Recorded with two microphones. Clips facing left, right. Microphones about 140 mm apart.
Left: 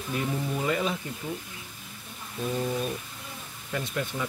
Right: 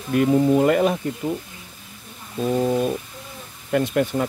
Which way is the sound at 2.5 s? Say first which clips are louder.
Right 9 dB; 65° right (ahead or behind).